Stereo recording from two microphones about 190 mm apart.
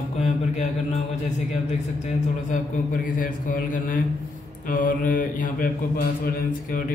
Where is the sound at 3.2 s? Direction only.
45° left (ahead or behind).